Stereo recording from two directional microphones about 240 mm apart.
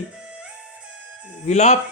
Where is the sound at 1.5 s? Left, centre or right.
Left.